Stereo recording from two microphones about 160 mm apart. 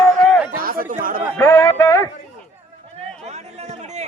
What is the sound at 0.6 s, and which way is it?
Chatter, 60° right (ahead or behind).